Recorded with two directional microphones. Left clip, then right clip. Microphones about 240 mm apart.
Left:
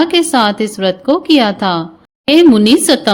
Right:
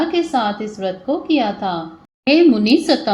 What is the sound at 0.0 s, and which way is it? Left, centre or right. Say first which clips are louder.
A woman's voice: left 7 dB; left.